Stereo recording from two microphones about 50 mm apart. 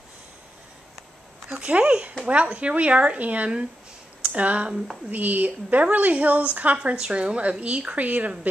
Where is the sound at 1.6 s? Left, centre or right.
Right.